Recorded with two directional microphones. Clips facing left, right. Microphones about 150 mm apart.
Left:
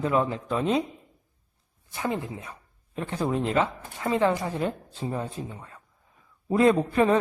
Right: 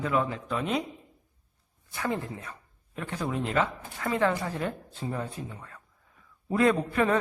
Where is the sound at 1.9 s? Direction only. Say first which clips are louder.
Left 2 dB; 20° left (ahead or behind).